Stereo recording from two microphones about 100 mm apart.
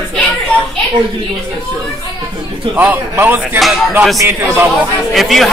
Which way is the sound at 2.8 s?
20° right (ahead or behind).